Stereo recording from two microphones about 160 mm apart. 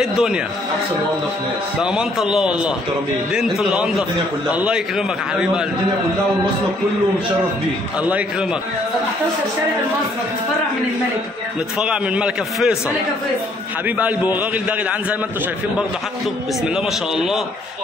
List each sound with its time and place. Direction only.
0.0 s a man's voice: 5° right (ahead or behind)
1.8 s a man's voice: 5° right (ahead or behind)
11.8 s a man's voice: 5° right (ahead or behind)
13.8 s a man's voice: 10° right (ahead or behind)
16.6 s a man's voice: 5° right (ahead or behind)